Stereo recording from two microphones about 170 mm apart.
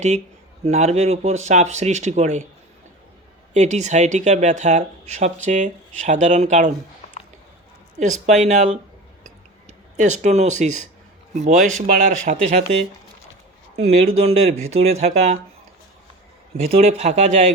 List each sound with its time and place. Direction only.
0.6 s speech: 40° right (ahead or behind)
3.5 s speech: 45° right (ahead or behind)
7.9 s speech: 45° right (ahead or behind)
10.0 s speech: 45° right (ahead or behind)
13.7 s speech: 35° right (ahead or behind)
16.6 s speech: 40° right (ahead or behind)